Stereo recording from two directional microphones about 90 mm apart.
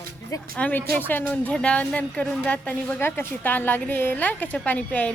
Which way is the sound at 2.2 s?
5° left (ahead or behind).